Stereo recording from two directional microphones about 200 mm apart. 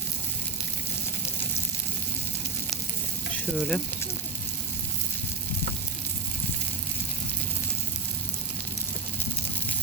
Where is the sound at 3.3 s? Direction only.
5° left (ahead or behind).